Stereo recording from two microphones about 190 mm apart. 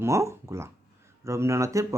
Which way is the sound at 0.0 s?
15° right (ahead or behind).